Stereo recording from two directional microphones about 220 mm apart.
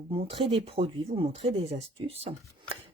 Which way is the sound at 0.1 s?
25° right (ahead or behind).